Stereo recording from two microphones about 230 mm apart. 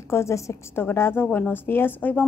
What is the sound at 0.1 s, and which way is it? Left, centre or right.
A woman's voice, centre.